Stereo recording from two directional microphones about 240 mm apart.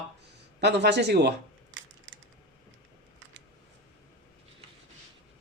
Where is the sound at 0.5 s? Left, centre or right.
Right.